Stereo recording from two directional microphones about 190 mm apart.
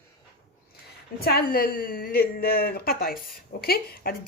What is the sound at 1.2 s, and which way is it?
Speech, 55° left (ahead or behind).